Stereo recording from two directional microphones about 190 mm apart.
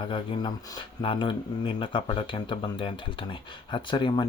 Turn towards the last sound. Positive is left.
turn(degrees=25)  # may be behind; listen again after turning